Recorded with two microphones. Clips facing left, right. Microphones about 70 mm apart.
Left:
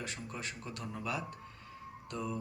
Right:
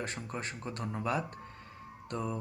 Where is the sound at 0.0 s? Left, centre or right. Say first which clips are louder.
Right 4 dB; right.